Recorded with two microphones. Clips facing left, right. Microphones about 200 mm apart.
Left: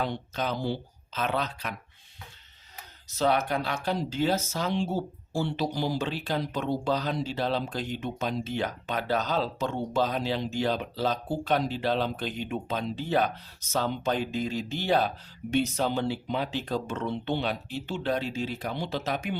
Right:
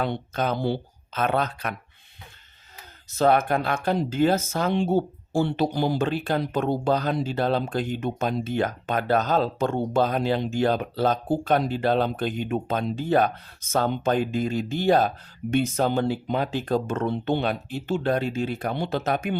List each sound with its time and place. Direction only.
0.0 s speech: 55° right (ahead or behind)
3.2 s speech: 50° right (ahead or behind)